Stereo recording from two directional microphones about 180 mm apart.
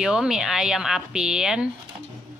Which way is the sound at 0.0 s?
5° right (ahead or behind).